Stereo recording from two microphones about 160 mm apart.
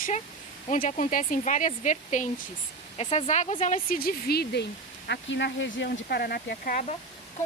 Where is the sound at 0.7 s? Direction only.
50° left (ahead or behind).